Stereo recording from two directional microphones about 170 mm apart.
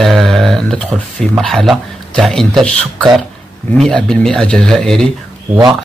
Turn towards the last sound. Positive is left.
turn(degrees=-25)  # may be behind; listen again after turning